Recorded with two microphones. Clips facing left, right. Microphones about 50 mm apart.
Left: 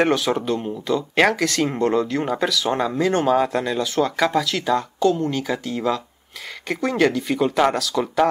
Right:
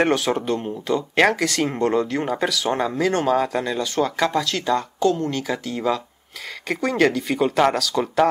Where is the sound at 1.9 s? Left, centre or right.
Centre.